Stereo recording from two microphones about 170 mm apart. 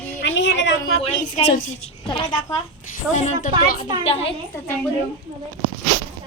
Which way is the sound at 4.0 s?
35° left (ahead or behind).